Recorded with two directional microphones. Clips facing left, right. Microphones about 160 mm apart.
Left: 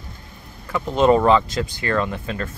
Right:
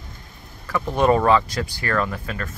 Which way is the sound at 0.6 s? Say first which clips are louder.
Left 2 dB; 20° left (ahead or behind).